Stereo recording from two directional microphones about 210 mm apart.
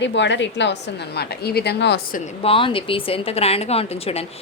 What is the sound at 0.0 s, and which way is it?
A woman's voice, 60° left (ahead or behind).